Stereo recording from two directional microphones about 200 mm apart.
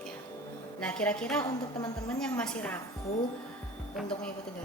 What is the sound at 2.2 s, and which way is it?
Speech, 5° left (ahead or behind).